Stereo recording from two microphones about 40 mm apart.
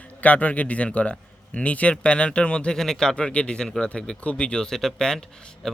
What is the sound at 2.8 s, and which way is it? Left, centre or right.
Speech, centre.